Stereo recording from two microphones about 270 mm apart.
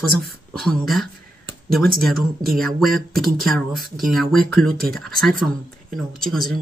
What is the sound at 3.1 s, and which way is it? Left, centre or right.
Speech, right.